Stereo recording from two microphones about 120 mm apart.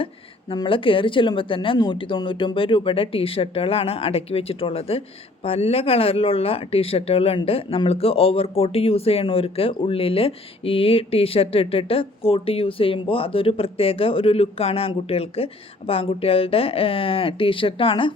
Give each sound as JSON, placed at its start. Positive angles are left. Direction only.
{"t": 0.5, "sound": "a woman's voice", "side_deg": 45}